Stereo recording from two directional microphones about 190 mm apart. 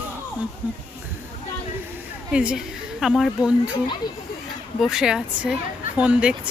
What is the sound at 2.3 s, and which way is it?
A woman's voice, 5° right (ahead or behind).